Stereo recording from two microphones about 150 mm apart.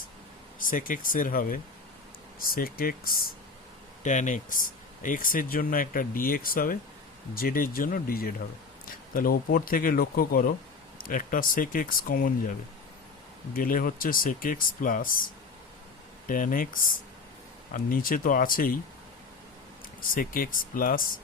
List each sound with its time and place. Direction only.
0.7 s speech: 65° left (ahead or behind)
4.0 s speech: 55° left (ahead or behind)
16.2 s speech: 65° left (ahead or behind)
17.7 s speech: 70° left (ahead or behind)
20.1 s speech: 70° left (ahead or behind)